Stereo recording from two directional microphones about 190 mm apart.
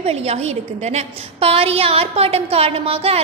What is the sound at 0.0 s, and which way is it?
A woman's voice, 35° right (ahead or behind).